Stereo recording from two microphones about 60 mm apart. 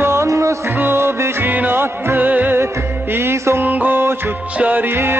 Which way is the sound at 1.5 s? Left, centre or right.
Right.